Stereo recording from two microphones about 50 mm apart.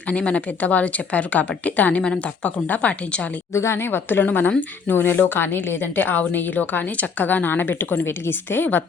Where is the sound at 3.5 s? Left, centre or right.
Left.